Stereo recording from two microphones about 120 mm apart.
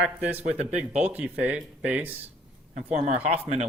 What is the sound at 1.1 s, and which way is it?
Speech, 15° right (ahead or behind).